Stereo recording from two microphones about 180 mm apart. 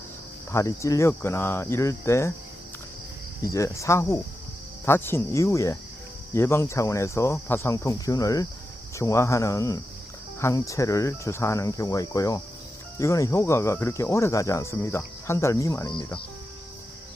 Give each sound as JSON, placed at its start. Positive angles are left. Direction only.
{"t": 0.5, "sound": "speech", "side_deg": 15}
{"t": 3.4, "sound": "speech", "side_deg": 15}